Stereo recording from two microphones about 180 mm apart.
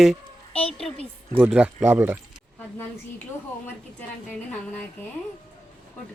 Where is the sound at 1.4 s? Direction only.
5° right (ahead or behind).